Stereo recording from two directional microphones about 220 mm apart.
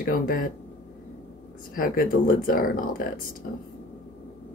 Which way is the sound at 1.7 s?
40° left (ahead or behind).